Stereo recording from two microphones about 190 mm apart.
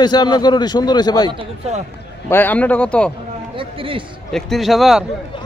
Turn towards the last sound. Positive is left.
turn(degrees=0)  # may be behind; listen again after turning